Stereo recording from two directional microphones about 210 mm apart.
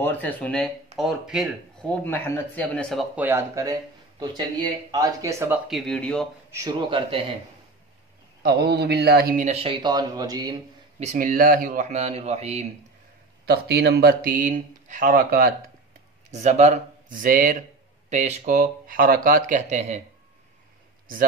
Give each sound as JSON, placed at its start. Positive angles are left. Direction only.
{"t": 0.0, "sound": "a man's voice", "side_deg": 5}
{"t": 5.7, "sound": "speech", "side_deg": 0}
{"t": 6.5, "sound": "a man's voice", "side_deg": -20}
{"t": 8.4, "sound": "a man's voice", "side_deg": -50}
{"t": 11.0, "sound": "a man's voice", "side_deg": -35}
{"t": 13.5, "sound": "a man's voice", "side_deg": -50}